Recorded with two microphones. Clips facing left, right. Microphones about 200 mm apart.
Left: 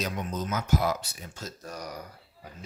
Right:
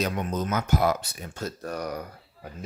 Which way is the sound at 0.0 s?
60° right (ahead or behind).